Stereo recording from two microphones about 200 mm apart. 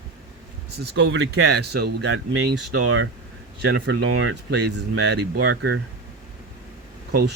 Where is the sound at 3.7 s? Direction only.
65° right (ahead or behind).